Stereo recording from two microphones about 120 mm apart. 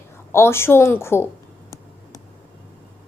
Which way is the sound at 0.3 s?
20° left (ahead or behind).